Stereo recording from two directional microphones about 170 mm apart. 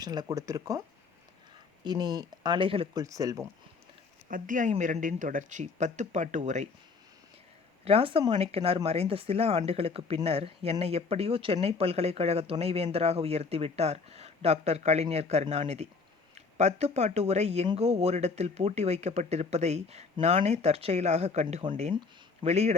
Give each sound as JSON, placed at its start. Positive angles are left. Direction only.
{"t": 0.0, "sound": "speech", "side_deg": -25}
{"t": 1.8, "sound": "speech", "side_deg": -25}
{"t": 3.0, "sound": "speech", "side_deg": -20}
{"t": 4.3, "sound": "speech", "side_deg": -50}
{"t": 7.9, "sound": "speech", "side_deg": -35}